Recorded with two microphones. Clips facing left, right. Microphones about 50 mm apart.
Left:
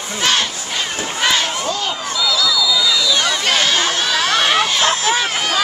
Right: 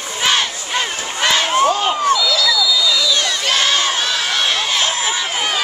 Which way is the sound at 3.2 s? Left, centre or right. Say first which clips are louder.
Left 1 dB; centre.